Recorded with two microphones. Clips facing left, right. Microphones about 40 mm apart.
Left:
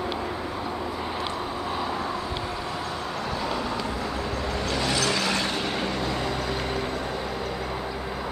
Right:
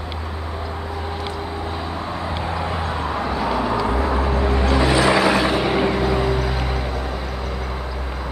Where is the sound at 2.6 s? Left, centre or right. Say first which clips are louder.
Right 6 dB; right; by 7.8 s centre.